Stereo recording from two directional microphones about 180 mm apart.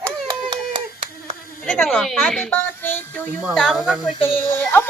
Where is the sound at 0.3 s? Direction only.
25° right (ahead or behind).